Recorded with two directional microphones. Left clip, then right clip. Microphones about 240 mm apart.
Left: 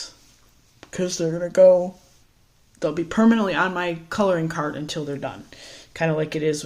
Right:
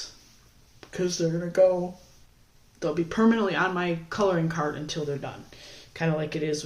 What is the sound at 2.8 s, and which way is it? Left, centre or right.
Speech, left.